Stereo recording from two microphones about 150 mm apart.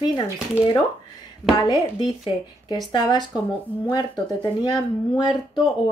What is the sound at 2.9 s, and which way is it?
Speech, 25° left (ahead or behind).